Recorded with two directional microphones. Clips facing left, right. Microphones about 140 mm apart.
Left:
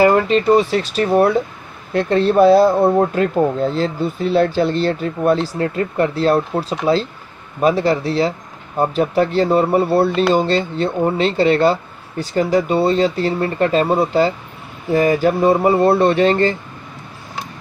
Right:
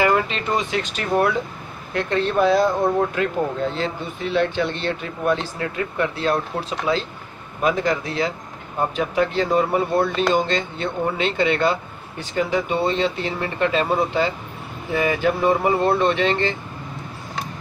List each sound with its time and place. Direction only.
0.0 s speech: 40° left (ahead or behind)